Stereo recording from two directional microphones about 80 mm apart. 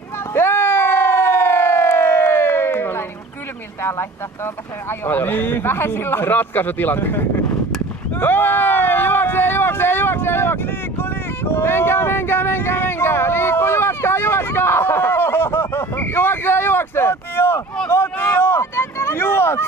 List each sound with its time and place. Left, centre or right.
0.3 s siren: left
4.9 s speech: left
8.2 s a sound: left